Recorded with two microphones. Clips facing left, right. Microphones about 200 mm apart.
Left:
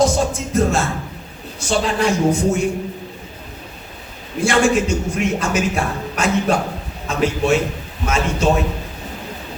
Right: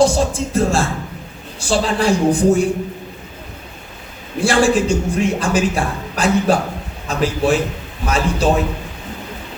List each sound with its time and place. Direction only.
0.0 s a man's voice: 30° right (ahead or behind)
4.4 s a man's voice: 30° right (ahead or behind)